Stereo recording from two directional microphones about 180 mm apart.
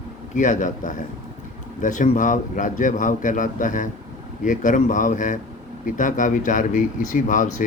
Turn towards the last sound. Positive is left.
turn(degrees=45)  # may be behind; listen again after turning